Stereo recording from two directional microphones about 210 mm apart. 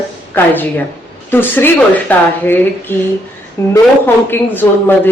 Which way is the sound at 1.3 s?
10° left (ahead or behind).